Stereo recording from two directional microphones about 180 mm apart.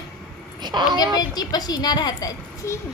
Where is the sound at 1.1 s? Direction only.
20° left (ahead or behind).